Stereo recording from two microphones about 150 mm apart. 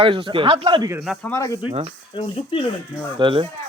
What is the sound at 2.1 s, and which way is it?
Speech, 35° left (ahead or behind).